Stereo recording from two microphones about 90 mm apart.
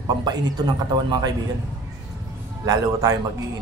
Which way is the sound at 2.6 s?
40° right (ahead or behind).